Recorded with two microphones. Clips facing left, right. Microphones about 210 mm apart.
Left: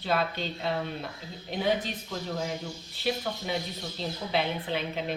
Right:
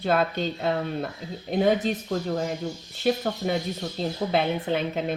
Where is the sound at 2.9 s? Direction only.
45° right (ahead or behind).